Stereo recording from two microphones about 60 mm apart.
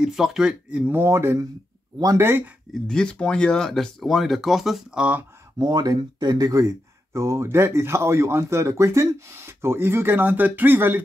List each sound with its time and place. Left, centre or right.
0.0 s speech: centre
0.9 s speech: right
2.7 s speech: centre
4.9 s speech: right
6.3 s speech: right
7.2 s speech: right